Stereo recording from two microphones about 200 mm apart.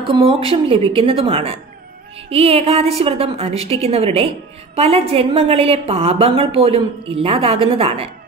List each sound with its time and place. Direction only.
0.0 s a woman's voice: 25° right (ahead or behind)